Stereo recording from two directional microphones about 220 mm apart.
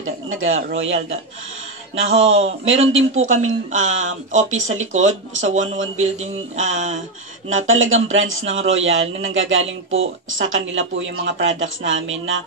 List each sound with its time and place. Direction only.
0.0 s a sound: 65° right (ahead or behind)
0.7 s a woman's voice: 60° right (ahead or behind)
3.2 s speech: 35° right (ahead or behind)
7.9 s a woman's voice: 65° right (ahead or behind)